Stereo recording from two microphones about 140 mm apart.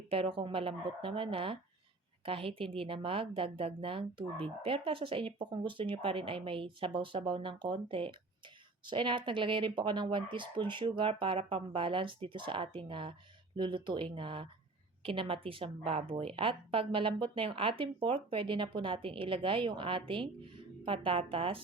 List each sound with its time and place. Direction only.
0.1 s a woman's voice: 40° right (ahead or behind)